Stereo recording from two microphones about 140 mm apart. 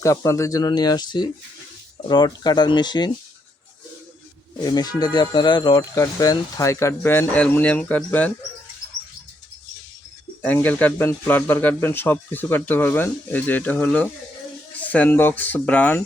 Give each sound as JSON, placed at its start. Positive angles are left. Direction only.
{"t": 0.0, "sound": "speech", "side_deg": 20}
{"t": 4.6, "sound": "speech", "side_deg": 30}
{"t": 5.9, "sound": "speech", "side_deg": 20}
{"t": 10.4, "sound": "speech", "side_deg": 10}